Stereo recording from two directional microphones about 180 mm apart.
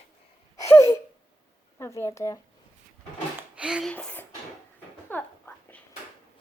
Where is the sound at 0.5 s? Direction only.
15° left (ahead or behind).